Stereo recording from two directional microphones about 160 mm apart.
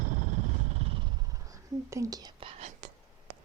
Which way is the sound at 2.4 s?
40° right (ahead or behind).